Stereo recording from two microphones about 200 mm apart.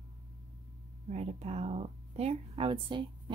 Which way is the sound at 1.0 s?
35° right (ahead or behind).